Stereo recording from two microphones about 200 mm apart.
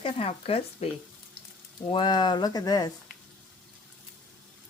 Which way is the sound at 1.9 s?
25° left (ahead or behind).